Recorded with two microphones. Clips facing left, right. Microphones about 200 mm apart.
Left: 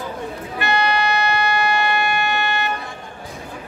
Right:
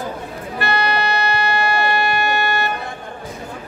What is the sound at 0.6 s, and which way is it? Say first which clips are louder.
Music: even; 35° right (ahead or behind).